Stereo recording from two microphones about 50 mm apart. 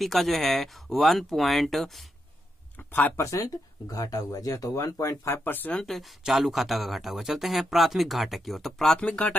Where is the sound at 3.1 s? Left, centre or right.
Left.